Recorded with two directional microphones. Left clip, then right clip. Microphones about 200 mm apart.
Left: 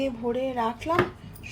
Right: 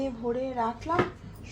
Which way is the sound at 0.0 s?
15° left (ahead or behind).